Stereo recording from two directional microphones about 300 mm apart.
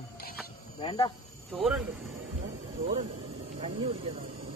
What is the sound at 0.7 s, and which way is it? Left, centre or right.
Speech, centre.